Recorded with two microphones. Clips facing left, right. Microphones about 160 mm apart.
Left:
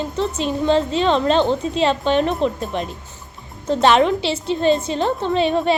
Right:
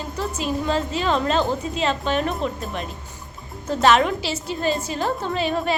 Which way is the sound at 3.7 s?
30° left (ahead or behind).